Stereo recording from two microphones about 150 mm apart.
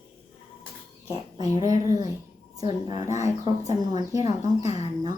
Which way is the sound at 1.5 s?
55° left (ahead or behind).